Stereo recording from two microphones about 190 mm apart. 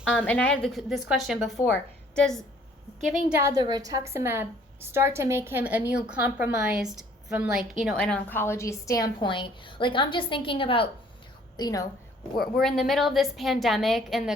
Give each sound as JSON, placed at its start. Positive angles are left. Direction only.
{"t": 0.1, "sound": "a woman's voice", "side_deg": 10}
{"t": 3.2, "sound": "a woman's voice", "side_deg": -15}
{"t": 12.4, "sound": "a woman's voice", "side_deg": 0}